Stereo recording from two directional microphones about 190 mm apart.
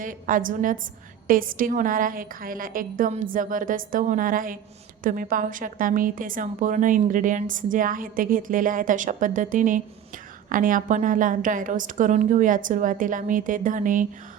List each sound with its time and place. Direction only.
0.0 s a woman's voice: 45° right (ahead or behind)